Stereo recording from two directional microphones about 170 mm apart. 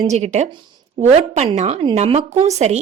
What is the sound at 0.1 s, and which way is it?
A woman's voice, 40° right (ahead or behind).